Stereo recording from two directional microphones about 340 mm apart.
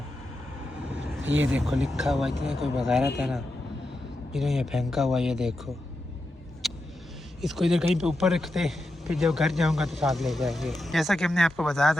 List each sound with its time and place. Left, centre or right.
0.9 s vehicle: centre
1.2 s speech: right
1.5 s a man's voice: centre
6.6 s vehicle: centre
7.4 s a man's voice: centre